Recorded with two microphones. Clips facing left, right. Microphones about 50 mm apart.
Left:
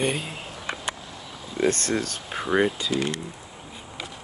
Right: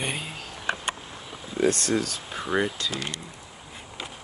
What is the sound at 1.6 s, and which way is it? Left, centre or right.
Speech, left.